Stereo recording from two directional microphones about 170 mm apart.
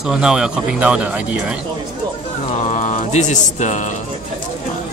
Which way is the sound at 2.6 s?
45° left (ahead or behind).